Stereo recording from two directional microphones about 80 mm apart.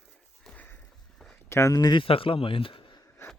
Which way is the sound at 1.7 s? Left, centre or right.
Left.